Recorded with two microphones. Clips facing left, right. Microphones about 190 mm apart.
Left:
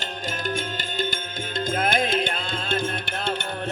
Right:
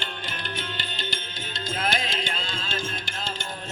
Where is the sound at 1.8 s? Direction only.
55° left (ahead or behind).